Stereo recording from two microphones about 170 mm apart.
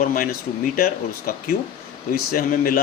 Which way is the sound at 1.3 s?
55° left (ahead or behind).